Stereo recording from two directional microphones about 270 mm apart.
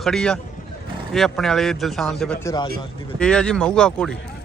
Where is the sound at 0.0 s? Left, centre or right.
Centre.